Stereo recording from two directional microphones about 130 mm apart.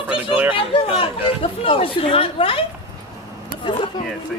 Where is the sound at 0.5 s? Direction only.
45° left (ahead or behind).